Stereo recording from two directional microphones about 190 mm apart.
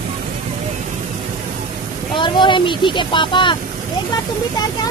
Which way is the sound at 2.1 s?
25° left (ahead or behind).